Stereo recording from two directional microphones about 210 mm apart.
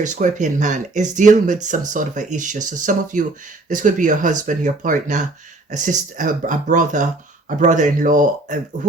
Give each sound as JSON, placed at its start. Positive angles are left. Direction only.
{"t": 0.0, "sound": "speech", "side_deg": -35}